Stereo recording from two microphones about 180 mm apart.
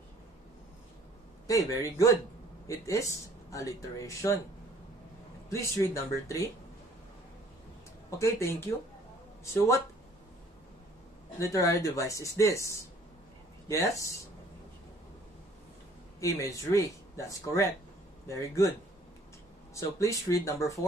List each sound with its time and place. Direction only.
1.5 s a man's voice: 20° left (ahead or behind)
5.5 s speech: 15° left (ahead or behind)
8.2 s speech: 15° left (ahead or behind)
11.3 s speech: 15° left (ahead or behind)
16.2 s speech: 15° left (ahead or behind)
19.7 s speech: 20° left (ahead or behind)